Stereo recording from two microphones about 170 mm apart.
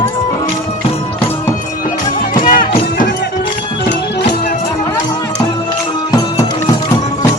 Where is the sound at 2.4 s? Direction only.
55° left (ahead or behind).